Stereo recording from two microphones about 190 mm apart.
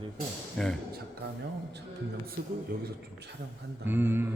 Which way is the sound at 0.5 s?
Centre (ahead or behind).